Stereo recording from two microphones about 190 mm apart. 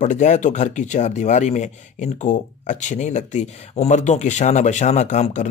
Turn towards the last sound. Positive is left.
turn(degrees=40)  # may be behind; listen again after turning